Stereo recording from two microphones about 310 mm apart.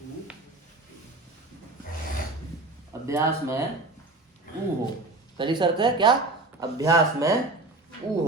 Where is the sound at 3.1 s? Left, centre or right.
Centre.